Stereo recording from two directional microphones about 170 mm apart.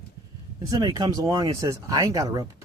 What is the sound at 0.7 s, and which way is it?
Speech, 25° right (ahead or behind).